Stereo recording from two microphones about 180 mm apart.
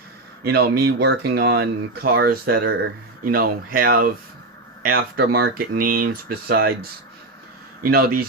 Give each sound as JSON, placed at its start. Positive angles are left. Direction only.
{"t": 0.4, "sound": "speech", "side_deg": -60}
{"t": 3.2, "sound": "speech", "side_deg": -50}
{"t": 7.9, "sound": "speech", "side_deg": -55}